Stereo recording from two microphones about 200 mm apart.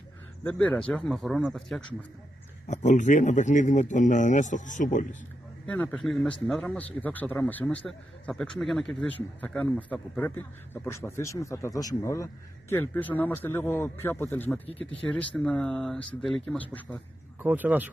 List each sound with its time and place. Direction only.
0.4 s speech: 5° left (ahead or behind)
2.7 s speech: 35° left (ahead or behind)
5.7 s a man's voice: 5° left (ahead or behind)
17.4 s speech: 10° right (ahead or behind)